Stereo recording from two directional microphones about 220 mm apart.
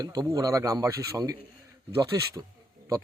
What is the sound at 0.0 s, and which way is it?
Speech, 15° right (ahead or behind).